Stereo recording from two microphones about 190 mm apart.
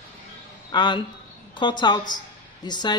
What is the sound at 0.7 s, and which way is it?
Speech, 25° left (ahead or behind).